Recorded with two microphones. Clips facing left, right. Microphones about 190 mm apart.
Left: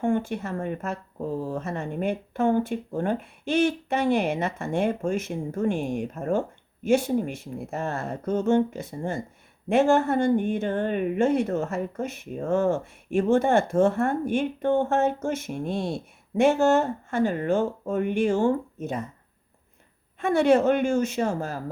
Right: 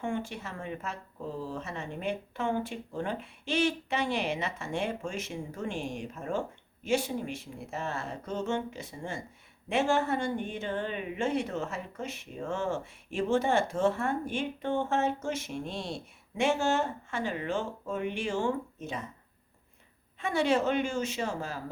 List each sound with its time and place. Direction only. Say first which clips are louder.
0.0 s speech: left 9 dB; 50° left (ahead or behind)
20.1 s speech: left 8 dB; 55° left (ahead or behind)